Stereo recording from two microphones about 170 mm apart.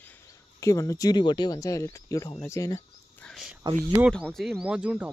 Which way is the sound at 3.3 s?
Centre (ahead or behind).